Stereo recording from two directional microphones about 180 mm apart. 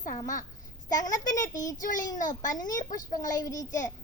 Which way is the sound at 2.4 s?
20° left (ahead or behind).